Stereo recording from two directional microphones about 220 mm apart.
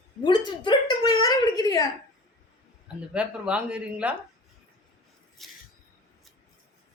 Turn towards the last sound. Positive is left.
turn(degrees=0)  # may be behind; listen again after turning